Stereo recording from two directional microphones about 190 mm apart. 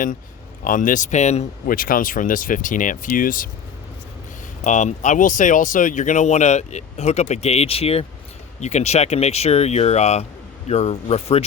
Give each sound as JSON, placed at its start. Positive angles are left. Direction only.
{"t": 0.6, "sound": "speech", "side_deg": 45}
{"t": 4.6, "sound": "speech", "side_deg": 40}